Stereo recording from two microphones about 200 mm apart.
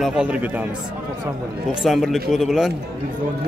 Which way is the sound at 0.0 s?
5° right (ahead or behind).